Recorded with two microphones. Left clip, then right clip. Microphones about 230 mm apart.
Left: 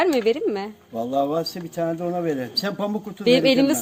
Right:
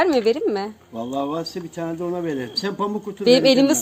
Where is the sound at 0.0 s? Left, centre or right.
Centre.